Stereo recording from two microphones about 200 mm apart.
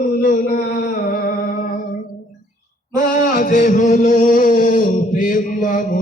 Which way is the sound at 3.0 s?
40° left (ahead or behind).